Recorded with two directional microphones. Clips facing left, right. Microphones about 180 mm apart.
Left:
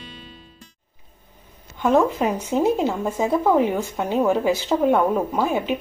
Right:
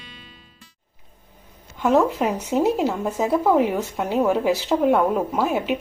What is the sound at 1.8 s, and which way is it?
A woman's voice, 5° right (ahead or behind).